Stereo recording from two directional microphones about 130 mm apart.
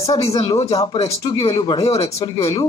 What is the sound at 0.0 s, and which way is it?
Speech, 50° left (ahead or behind).